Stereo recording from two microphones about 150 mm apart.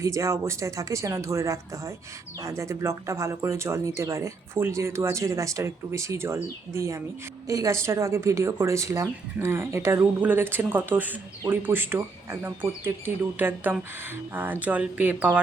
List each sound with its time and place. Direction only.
0.0 s a woman's voice: 20° right (ahead or behind)